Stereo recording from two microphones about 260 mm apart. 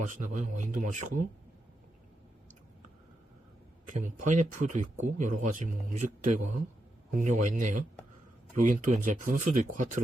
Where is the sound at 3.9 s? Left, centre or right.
Right.